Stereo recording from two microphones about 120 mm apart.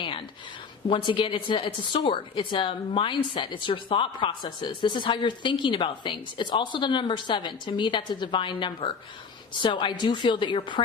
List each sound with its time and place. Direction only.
0.9 s a woman's voice: 40° left (ahead or behind)